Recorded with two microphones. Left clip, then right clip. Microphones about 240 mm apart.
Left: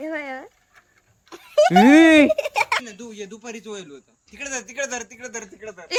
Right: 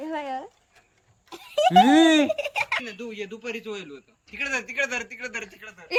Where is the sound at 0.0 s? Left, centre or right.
Centre.